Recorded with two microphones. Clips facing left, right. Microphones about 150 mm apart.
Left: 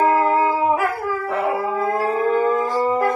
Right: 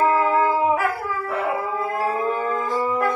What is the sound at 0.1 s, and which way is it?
Music, 40° left (ahead or behind).